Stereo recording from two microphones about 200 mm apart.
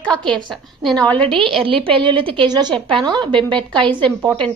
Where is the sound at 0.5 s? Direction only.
Centre (ahead or behind).